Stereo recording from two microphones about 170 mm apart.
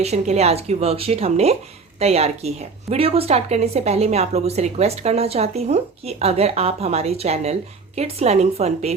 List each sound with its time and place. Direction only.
0.0 s a woman's voice: 40° right (ahead or behind)